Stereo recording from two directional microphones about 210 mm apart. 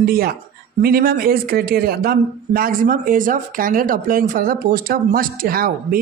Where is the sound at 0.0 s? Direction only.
45° right (ahead or behind).